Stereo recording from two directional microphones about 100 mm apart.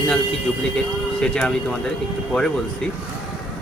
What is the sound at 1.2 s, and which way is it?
Speech, 5° left (ahead or behind).